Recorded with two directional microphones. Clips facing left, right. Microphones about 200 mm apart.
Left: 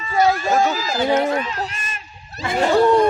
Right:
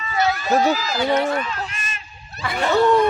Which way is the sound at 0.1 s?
30° left (ahead or behind).